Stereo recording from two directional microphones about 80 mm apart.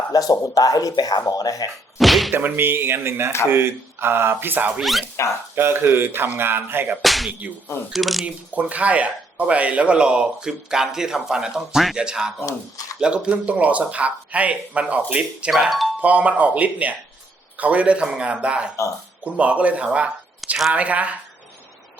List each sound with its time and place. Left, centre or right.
0.1 s speech: left
2.0 s speech: centre
2.3 s speech: right
4.8 s speech: centre
5.5 s speech: right
7.0 s slap: centre
7.9 s speech: centre
8.2 s speech: centre
16.0 s speech: centre
20.4 s speech: centre
20.7 s speech: centre